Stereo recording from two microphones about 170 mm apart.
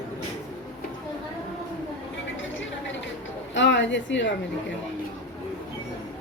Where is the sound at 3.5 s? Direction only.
90° left.